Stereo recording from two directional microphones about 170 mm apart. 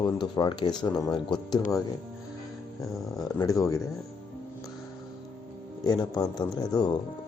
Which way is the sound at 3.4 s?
20° left (ahead or behind).